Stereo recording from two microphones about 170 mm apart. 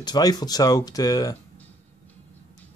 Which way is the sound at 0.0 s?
25° left (ahead or behind).